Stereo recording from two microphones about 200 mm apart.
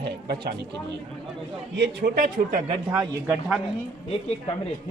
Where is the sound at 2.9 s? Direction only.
Centre (ahead or behind).